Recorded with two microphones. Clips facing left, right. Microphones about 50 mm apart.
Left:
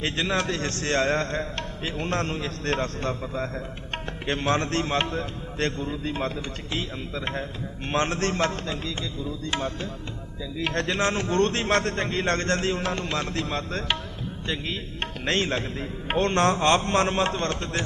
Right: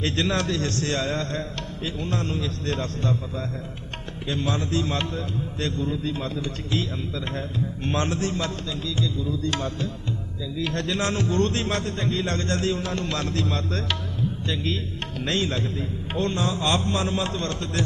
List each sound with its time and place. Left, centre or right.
0.0 s a man's voice: left
2.0 s a man's voice: left
2.3 s a man's voice: left
4.9 s a man's voice: left
7.9 s a man's voice: left
8.2 s a man's voice: left
9.4 s music: centre
10.6 s a man's voice: left
11.7 s a man's voice: left
14.4 s music: left
15.2 s a man's voice: left
16.1 s a man's voice: left